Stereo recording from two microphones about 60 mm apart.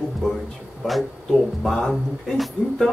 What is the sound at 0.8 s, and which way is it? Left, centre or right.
Speech, centre.